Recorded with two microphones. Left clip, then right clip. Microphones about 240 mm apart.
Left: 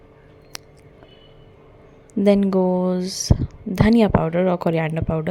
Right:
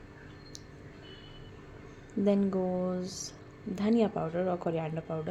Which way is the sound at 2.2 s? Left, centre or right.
Left.